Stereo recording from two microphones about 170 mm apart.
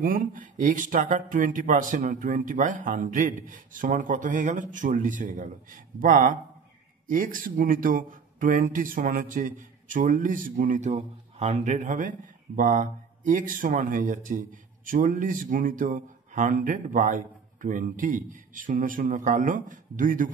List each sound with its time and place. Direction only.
0.0 s a man's voice: 55° right (ahead or behind)